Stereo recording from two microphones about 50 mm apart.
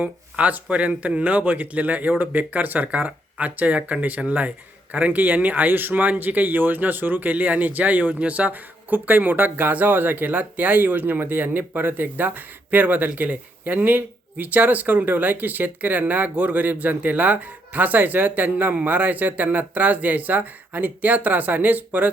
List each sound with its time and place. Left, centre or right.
0.0 s speech: right